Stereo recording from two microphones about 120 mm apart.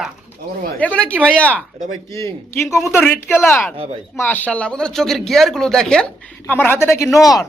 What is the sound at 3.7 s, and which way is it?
Speech, 50° right (ahead or behind).